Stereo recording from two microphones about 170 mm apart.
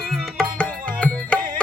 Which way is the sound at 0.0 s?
Centre (ahead or behind).